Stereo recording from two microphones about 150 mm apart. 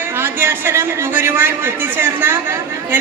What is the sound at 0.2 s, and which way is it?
A man's voice, 15° right (ahead or behind).